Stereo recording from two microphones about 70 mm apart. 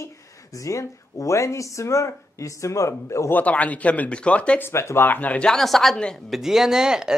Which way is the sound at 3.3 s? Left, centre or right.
Left.